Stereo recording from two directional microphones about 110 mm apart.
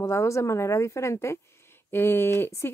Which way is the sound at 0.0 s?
25° left (ahead or behind).